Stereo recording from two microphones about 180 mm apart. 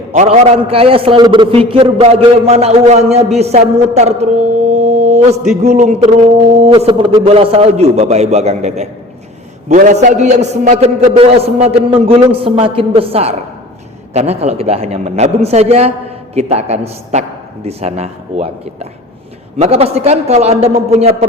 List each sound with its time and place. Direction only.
0.1 s a man's voice: 35° right (ahead or behind)
4.7 s mantra: 40° right (ahead or behind)
5.6 s a man's voice: 40° right (ahead or behind)